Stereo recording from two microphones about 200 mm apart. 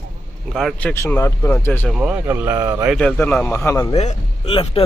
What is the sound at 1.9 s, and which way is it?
Speech, 5° right (ahead or behind).